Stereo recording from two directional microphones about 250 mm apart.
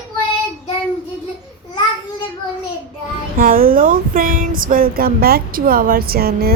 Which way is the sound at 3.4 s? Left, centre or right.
Right.